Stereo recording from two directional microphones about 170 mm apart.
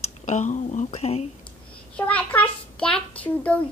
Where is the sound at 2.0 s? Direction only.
10° left (ahead or behind).